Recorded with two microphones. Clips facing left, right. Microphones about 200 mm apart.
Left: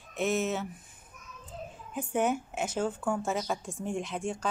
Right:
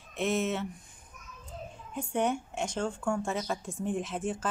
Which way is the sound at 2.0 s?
5° left (ahead or behind).